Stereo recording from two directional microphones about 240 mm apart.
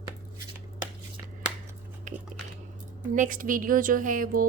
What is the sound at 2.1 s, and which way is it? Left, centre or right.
Biting, right.